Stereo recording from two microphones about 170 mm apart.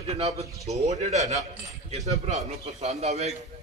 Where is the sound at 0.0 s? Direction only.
40° right (ahead or behind).